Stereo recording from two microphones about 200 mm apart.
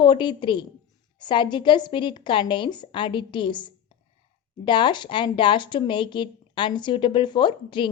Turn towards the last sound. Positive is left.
turn(degrees=25)  # may be behind; listen again after turning